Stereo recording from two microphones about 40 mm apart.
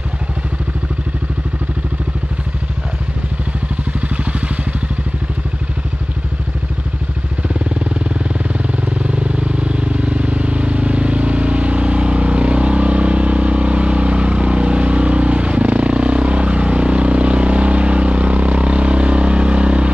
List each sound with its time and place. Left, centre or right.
4.2 s vehicle: right
7.4 s vehicle: right